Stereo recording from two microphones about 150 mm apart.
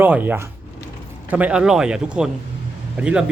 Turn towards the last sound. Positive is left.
turn(degrees=-10)  # may be behind; listen again after turning